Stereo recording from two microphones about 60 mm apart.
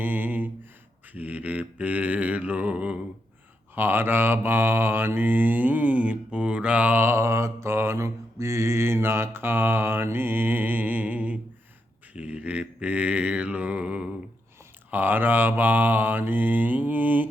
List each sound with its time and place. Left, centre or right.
0.0 s a sound: right
1.1 s mantra: right
3.8 s mantra: right
7.0 s mantra: right
14.8 s mantra: right